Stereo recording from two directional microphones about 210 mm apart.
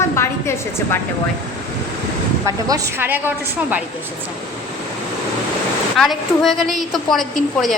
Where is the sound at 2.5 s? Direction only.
15° right (ahead or behind).